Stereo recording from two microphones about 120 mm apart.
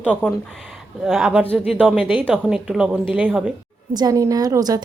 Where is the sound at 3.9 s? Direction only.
30° right (ahead or behind).